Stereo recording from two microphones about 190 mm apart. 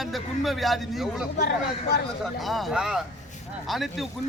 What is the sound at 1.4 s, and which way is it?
Speech, 60° left (ahead or behind).